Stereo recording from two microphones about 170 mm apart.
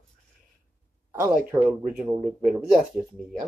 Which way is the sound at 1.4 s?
10° right (ahead or behind).